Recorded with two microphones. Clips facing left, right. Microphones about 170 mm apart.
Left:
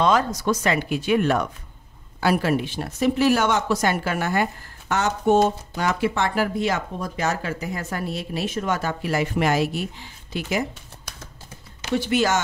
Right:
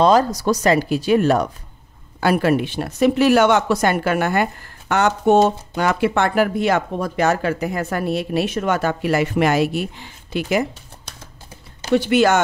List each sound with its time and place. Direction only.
0.0 s speech: 35° right (ahead or behind)
2.1 s speech: 55° right (ahead or behind)
11.9 s speech: 70° right (ahead or behind)